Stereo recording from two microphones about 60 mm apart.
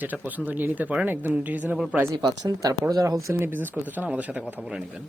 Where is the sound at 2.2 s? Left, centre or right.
Right.